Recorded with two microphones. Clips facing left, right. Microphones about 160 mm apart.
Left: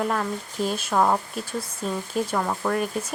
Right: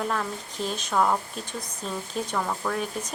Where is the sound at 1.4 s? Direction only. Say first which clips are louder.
Left 5 dB; 5° left (ahead or behind).